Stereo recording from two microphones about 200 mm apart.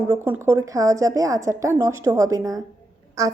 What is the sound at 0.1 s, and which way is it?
A woman's voice, 10° right (ahead or behind).